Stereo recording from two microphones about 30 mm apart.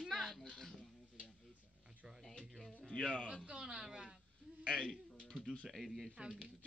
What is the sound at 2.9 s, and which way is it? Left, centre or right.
Music, left.